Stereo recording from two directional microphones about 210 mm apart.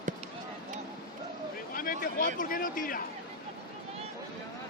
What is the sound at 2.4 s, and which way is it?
Speech, 40° left (ahead or behind).